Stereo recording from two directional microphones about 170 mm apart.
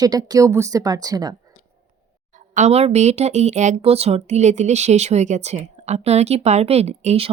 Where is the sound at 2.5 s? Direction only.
40° right (ahead or behind).